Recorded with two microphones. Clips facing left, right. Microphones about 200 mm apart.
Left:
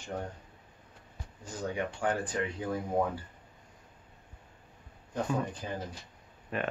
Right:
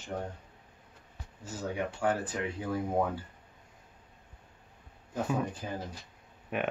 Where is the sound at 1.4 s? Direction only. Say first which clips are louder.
Even; 5° right (ahead or behind).